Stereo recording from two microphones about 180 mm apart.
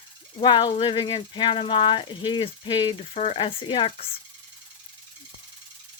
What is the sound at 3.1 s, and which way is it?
Speech, 35° left (ahead or behind).